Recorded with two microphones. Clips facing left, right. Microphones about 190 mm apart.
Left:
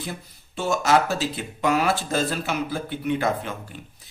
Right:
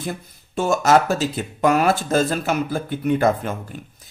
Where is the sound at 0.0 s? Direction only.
50° right (ahead or behind).